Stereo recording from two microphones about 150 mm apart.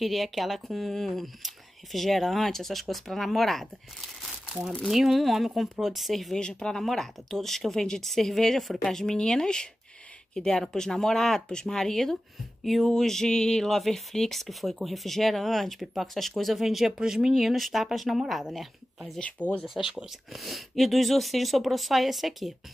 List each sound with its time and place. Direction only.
0.0 s speech: centre (ahead or behind)
4.6 s speech: centre (ahead or behind)